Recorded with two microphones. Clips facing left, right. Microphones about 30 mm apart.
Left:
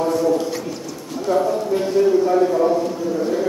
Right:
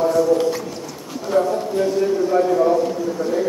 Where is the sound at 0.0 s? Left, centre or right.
Centre.